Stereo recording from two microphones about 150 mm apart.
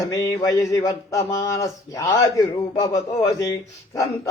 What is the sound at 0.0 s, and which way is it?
Speech, 25° left (ahead or behind).